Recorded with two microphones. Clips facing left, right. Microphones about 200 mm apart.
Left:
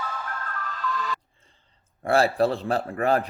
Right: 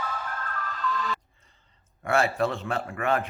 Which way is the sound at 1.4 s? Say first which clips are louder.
Left 2 dB; 30° left (ahead or behind).